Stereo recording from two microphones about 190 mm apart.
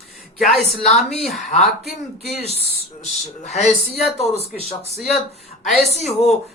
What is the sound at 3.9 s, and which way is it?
Speech, centre (ahead or behind).